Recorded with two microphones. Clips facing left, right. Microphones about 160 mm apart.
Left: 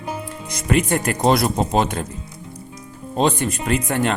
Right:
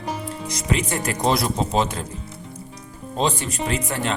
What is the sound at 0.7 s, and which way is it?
Speech, 55° left (ahead or behind).